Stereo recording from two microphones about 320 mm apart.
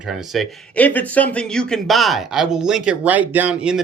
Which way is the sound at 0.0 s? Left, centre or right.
Centre.